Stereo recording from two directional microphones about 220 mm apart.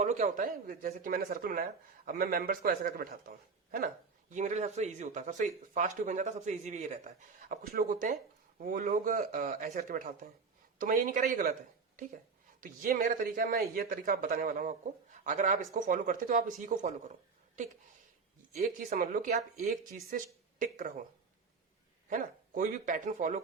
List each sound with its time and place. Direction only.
0.0 s speech: 35° right (ahead or behind)
12.5 s speech: 40° right (ahead or behind)
18.5 s a woman's voice: 30° right (ahead or behind)
22.1 s speech: 35° right (ahead or behind)